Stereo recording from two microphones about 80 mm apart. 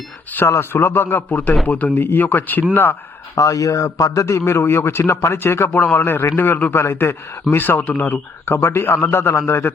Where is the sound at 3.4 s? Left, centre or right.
Left.